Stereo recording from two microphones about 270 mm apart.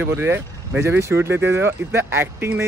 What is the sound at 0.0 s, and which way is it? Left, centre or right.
Speech, centre.